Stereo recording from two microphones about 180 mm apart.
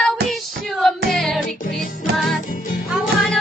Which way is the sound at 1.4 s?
45° left (ahead or behind).